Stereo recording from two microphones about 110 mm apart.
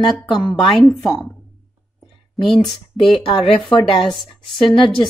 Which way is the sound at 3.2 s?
50° left (ahead or behind).